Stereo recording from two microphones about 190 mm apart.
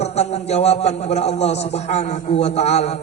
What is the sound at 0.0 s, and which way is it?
A man's voice, 35° left (ahead or behind).